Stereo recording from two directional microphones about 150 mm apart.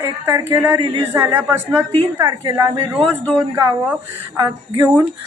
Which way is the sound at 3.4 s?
20° right (ahead or behind).